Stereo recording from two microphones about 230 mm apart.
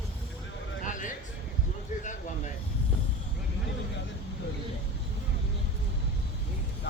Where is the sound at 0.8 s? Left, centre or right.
Left.